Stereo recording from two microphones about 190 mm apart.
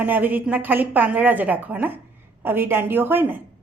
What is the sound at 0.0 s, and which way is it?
A woman's voice, 10° right (ahead or behind).